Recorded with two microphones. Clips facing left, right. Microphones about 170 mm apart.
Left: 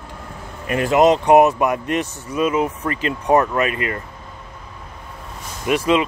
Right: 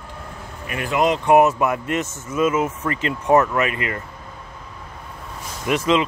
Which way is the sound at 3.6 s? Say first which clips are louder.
Left 2 dB; 25° right (ahead or behind).